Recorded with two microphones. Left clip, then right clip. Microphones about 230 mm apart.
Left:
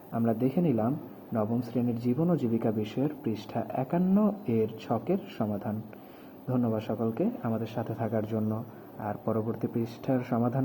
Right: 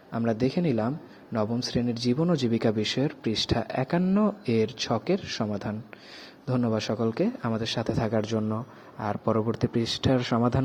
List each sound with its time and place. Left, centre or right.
0.1 s speech: right
0.3 s speech: right
0.8 s speech: right
1.7 s speech: right
2.1 s speech: right